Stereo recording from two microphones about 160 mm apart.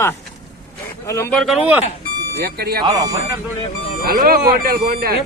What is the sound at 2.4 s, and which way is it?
Speech, 75° right (ahead or behind).